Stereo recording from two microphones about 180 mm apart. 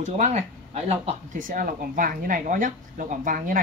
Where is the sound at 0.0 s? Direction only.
40° right (ahead or behind).